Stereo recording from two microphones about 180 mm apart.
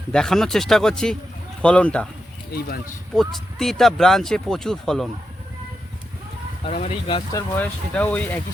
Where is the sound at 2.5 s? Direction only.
60° left (ahead or behind).